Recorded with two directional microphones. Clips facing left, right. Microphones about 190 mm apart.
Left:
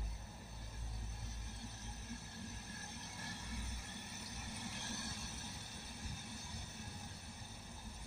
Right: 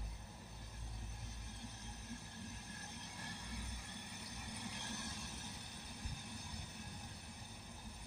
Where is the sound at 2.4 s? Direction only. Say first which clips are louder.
Left 1 dB; 15° right (ahead or behind).